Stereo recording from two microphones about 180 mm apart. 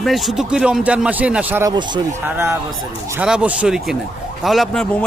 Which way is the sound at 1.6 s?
20° right (ahead or behind).